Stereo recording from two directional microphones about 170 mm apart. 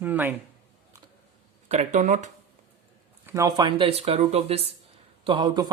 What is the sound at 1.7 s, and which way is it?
Speech, 45° right (ahead or behind).